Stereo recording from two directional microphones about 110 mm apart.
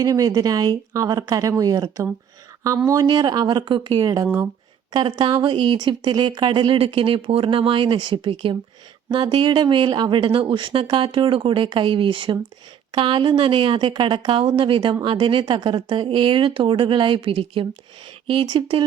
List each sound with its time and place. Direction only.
0.0 s speech: 35° right (ahead or behind)